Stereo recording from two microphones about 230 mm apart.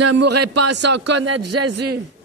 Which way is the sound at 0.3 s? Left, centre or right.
Right.